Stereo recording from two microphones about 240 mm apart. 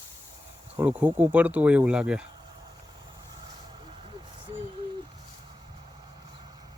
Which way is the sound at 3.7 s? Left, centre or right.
Centre.